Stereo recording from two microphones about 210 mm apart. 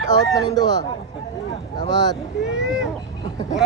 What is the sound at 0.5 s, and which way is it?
Speech, 20° left (ahead or behind).